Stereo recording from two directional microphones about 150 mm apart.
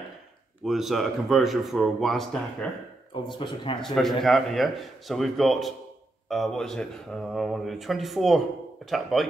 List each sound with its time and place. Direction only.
0.7 s speech: centre (ahead or behind)
3.3 s speech: 30° left (ahead or behind)
3.8 s speech: centre (ahead or behind)